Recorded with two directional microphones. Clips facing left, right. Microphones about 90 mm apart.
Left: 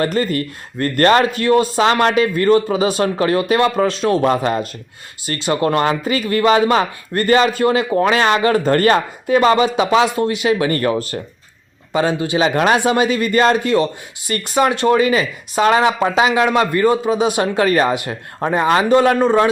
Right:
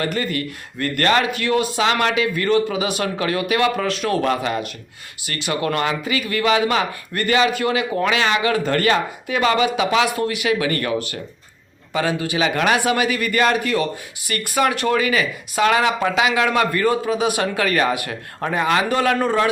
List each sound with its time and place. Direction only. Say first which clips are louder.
0.0 s speech: left 5 dB; 35° left (ahead or behind)